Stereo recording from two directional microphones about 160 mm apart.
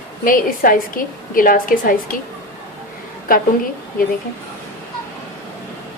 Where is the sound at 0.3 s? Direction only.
60° left (ahead or behind).